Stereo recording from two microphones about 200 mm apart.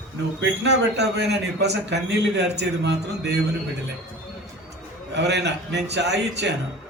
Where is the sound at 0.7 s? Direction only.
60° right (ahead or behind).